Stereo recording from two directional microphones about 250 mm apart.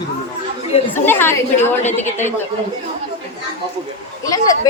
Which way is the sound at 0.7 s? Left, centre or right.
Left.